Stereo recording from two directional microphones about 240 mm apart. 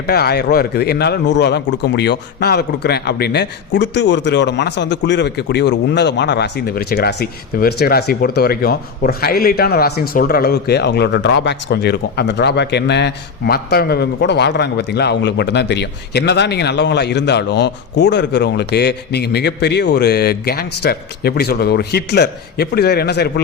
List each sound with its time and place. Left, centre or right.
0.1 s a man's voice: left